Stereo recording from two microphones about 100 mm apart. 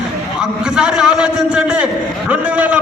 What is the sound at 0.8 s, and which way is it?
A man's voice, 5° right (ahead or behind).